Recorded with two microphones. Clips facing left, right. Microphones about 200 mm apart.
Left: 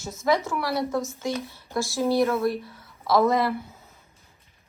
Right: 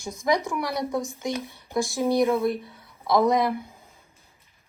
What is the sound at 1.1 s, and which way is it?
Speech, 15° right (ahead or behind).